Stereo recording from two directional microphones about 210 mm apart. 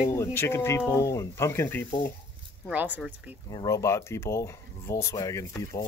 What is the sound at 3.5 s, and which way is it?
Speech, 15° left (ahead or behind).